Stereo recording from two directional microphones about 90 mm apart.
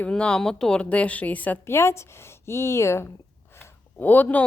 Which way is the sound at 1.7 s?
30° left (ahead or behind).